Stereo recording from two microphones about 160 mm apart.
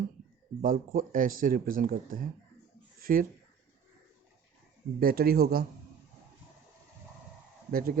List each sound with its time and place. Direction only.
0.6 s speech: 60° right (ahead or behind)
4.9 s speech: 70° right (ahead or behind)
7.7 s speech: 65° right (ahead or behind)